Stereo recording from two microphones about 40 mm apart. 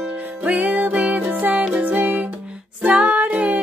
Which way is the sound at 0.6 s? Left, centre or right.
Right.